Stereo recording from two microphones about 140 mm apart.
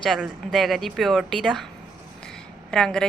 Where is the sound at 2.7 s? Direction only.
5° left (ahead or behind).